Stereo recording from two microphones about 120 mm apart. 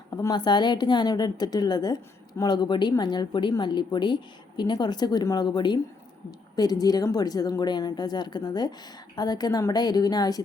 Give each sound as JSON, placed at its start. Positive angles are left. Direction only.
{"t": 0.1, "sound": "a woman's voice", "side_deg": 30}